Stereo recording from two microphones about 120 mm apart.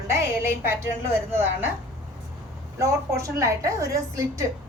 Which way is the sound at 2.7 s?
25° right (ahead or behind).